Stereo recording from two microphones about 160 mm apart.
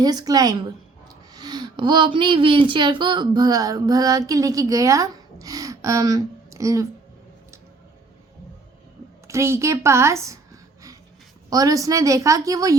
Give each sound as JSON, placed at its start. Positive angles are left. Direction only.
{"t": 0.0, "sound": "a woman's voice", "side_deg": -25}
{"t": 9.2, "sound": "a woman's voice", "side_deg": -15}